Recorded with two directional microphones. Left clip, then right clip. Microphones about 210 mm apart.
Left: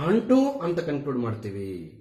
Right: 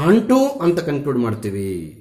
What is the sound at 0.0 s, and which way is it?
A man's voice, 45° right (ahead or behind).